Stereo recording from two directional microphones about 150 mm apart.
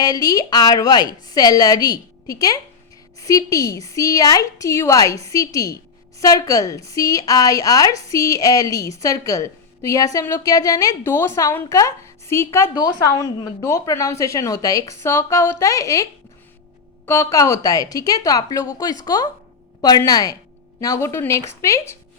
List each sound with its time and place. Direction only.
0.0 s a woman's voice: 25° left (ahead or behind)
17.1 s a woman's voice: 20° left (ahead or behind)